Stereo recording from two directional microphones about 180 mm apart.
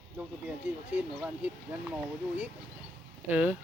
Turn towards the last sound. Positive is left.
turn(degrees=-5)  # may be behind; listen again after turning